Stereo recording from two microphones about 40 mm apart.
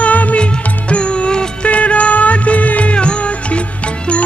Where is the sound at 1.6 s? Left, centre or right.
Left.